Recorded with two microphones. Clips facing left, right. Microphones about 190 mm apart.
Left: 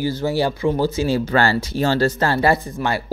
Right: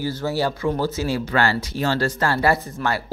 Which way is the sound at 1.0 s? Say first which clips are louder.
Left 3 dB; 30° left (ahead or behind).